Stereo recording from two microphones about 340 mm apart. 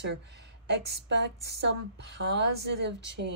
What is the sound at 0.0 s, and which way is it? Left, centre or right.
Speech, right.